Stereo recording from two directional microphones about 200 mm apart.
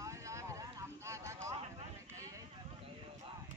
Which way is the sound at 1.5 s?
30° right (ahead or behind).